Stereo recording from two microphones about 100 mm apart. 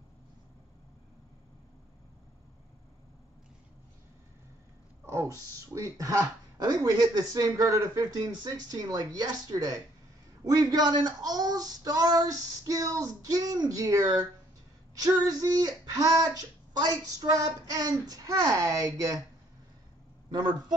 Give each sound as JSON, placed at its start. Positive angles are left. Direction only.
{"t": 5.0, "sound": "a sound", "side_deg": -30}
{"t": 5.8, "sound": "speech", "side_deg": -35}
{"t": 20.2, "sound": "a man's voice", "side_deg": -45}